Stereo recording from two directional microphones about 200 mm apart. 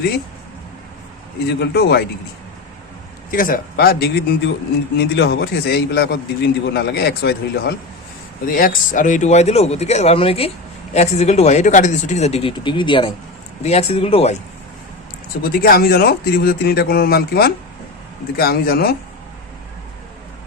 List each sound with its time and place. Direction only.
1.5 s a man's voice: 55° left (ahead or behind)
3.3 s a man's voice: 45° left (ahead or behind)
15.5 s speech: 50° left (ahead or behind)